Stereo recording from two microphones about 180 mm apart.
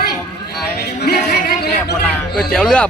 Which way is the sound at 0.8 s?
65° left (ahead or behind).